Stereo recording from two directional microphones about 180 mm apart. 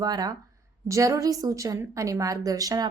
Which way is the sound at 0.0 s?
20° right (ahead or behind).